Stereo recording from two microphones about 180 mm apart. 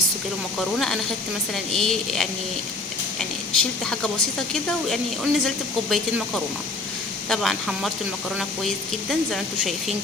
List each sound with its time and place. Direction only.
1.5 s speech: centre (ahead or behind)